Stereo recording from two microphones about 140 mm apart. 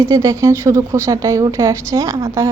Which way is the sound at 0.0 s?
25° right (ahead or behind).